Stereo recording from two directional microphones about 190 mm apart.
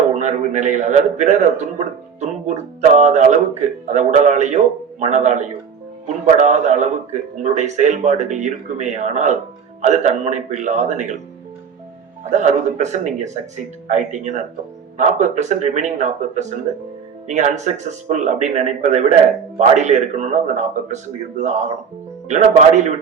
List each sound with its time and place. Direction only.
0.2 s a man's voice: 40° right (ahead or behind)
12.2 s a man's voice: 40° right (ahead or behind)